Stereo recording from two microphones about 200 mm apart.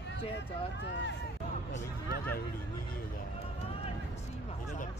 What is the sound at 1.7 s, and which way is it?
Speech, 50° left (ahead or behind).